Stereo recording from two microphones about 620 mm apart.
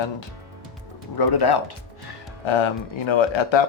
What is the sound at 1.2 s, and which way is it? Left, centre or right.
Speech, left.